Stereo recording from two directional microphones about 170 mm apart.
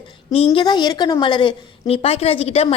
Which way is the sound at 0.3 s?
35° left (ahead or behind).